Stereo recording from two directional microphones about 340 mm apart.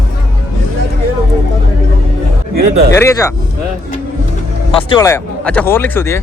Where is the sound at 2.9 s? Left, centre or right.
Centre.